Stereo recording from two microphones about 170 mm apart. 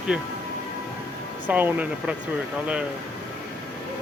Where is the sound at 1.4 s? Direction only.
10° right (ahead or behind).